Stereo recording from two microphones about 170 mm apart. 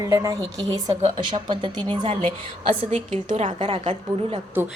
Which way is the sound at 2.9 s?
45° right (ahead or behind).